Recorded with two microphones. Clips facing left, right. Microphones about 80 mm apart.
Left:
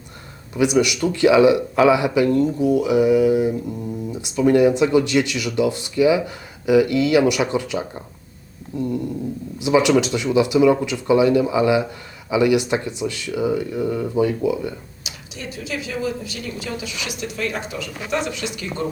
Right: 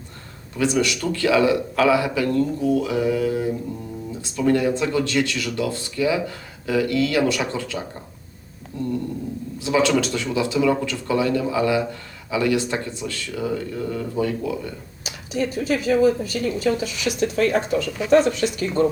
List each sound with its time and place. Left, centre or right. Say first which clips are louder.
0.5 s speech: left 3 dB; centre
15.0 s a woman's voice: right 11 dB; right